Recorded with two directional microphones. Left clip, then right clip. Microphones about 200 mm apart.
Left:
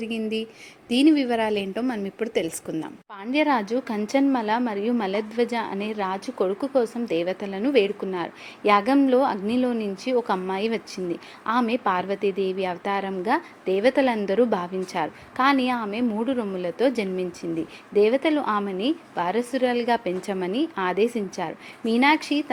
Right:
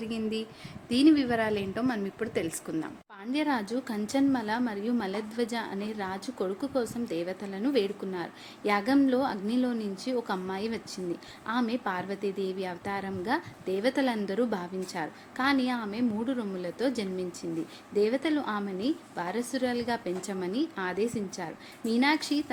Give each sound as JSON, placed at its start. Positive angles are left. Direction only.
{"t": 0.0, "sound": "a woman's voice", "side_deg": 15}
{"t": 17.9, "sound": "a woman's voice", "side_deg": 5}